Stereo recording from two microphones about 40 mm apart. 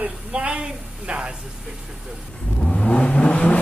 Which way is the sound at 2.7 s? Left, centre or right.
Left.